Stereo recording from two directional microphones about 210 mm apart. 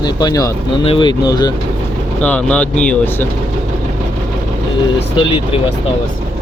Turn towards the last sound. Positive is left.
turn(degrees=25)  # may be behind; listen again after turning